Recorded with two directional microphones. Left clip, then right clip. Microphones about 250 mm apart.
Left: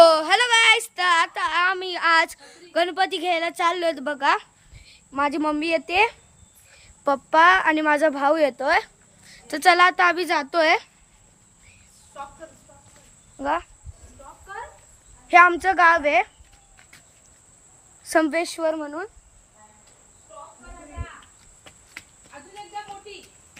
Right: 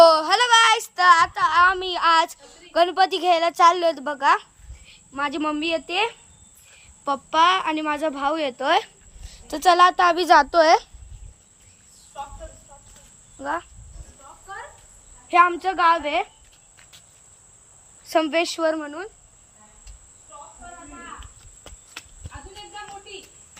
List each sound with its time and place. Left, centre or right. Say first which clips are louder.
0.0 s child singing: even; centre
5.1 s a woman's voice: left 2 dB; centre
8.8 s a woman's voice: even; centre
13.4 s a woman's voice: left 3 dB; centre
15.3 s a woman's voice: left 3 dB; centre
18.0 s a woman's voice: even; left